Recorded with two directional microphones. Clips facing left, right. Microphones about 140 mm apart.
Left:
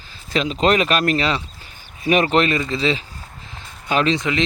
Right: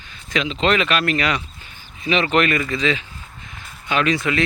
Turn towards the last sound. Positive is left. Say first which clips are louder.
# even
turn(degrees=20)  # may be behind; listen again after turning